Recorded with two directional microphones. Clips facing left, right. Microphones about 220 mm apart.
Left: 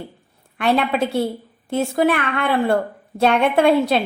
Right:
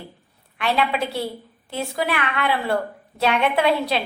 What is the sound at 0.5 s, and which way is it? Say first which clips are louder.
A woman's voice: left 4 dB; 50° left (ahead or behind).